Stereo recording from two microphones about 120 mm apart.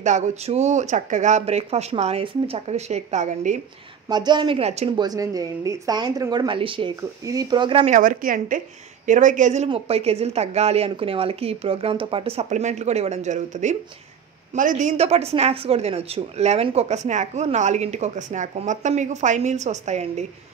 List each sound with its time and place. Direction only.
0.0 s speech: 85° right
1.4 s speech: 60° right (ahead or behind); by 3.5 s 85° right
4.1 s speech: 35° right (ahead or behind)
4.6 s speech: 60° right (ahead or behind)
4.9 s speech: 30° right (ahead or behind)
7.0 s speech: 30° right (ahead or behind)
7.8 s a woman's voice: 90° right
9.7 s speech: 60° right (ahead or behind)
12.4 s speech: 75° right (ahead or behind)